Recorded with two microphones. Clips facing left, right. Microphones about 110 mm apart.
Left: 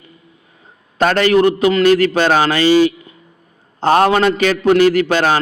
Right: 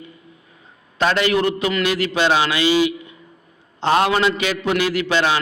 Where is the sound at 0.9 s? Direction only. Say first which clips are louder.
Left 6 dB; 45° left (ahead or behind).